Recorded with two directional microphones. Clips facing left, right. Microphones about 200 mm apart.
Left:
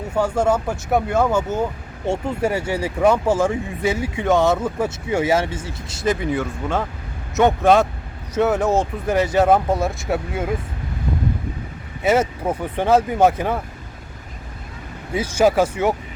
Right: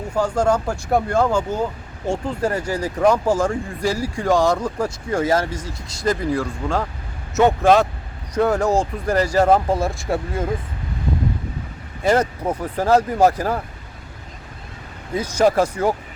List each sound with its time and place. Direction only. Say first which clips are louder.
0.1 s speech: even; 5° left (ahead or behind)
2.0 s speech: left 1 dB; 25° left (ahead or behind)
2.5 s speech: left 1 dB; 5° left (ahead or behind)
5.4 s speech: left 1 dB; 25° left (ahead or behind)
6.1 s speech: even; 5° left (ahead or behind)
12.0 s speech: even; 5° left (ahead or behind)
15.1 s speech: even; 5° left (ahead or behind)